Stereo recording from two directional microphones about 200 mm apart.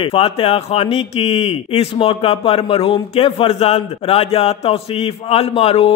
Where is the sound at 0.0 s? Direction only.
30° left (ahead or behind).